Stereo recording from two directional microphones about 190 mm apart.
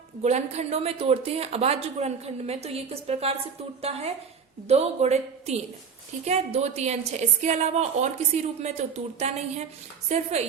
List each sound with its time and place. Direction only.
0.2 s speech: 35° right (ahead or behind)